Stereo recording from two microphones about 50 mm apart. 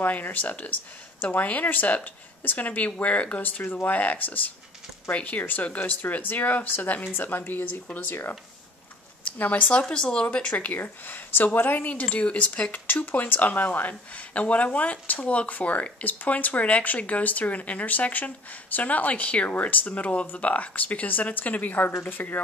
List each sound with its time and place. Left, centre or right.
0.0 s speech: left
9.4 s speech: left
9.8 s speech: centre
10.2 s speech: left
11.8 s speech: left
12.7 s speech: left